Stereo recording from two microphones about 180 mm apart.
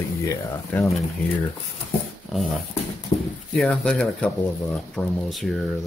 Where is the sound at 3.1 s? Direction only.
25° left (ahead or behind).